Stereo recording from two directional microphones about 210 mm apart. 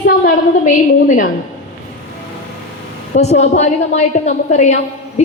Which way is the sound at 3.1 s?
30° left (ahead or behind).